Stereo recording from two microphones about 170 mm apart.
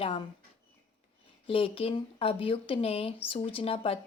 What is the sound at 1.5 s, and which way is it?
Speech, 30° left (ahead or behind).